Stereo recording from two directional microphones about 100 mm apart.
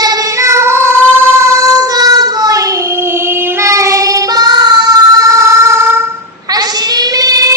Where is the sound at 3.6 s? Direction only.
30° right (ahead or behind).